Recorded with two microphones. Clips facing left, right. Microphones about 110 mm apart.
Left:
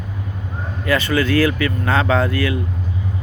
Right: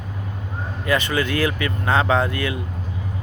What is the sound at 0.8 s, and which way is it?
Speech, 20° right (ahead or behind).